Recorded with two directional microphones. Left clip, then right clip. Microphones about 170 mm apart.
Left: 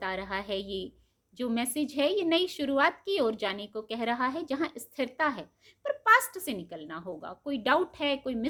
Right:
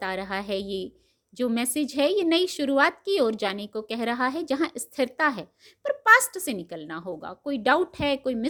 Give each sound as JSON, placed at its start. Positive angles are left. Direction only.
{"t": 0.0, "sound": "a woman's voice", "side_deg": -35}